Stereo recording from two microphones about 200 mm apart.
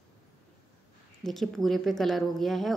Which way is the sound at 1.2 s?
Centre (ahead or behind).